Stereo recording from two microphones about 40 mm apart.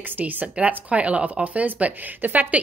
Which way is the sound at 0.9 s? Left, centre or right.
Right.